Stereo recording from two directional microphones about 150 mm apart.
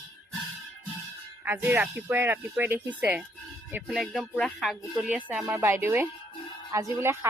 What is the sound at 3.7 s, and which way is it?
Music, 10° right (ahead or behind).